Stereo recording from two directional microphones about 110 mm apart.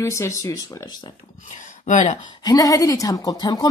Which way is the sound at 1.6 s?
90° left.